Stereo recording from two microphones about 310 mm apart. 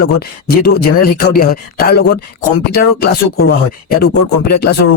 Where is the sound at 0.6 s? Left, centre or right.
Left.